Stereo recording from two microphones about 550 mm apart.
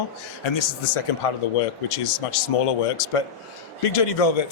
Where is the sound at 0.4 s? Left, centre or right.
Left.